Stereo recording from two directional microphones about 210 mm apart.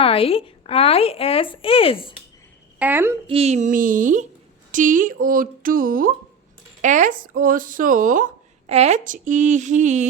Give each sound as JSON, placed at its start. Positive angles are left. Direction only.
{"t": 0.0, "sound": "a woman's voice", "side_deg": 25}
{"t": 2.7, "sound": "speech", "side_deg": -10}
{"t": 3.2, "sound": "speech", "side_deg": -30}